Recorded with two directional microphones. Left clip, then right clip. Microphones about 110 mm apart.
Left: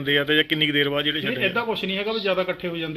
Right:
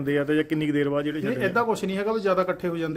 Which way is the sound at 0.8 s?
15° right (ahead or behind).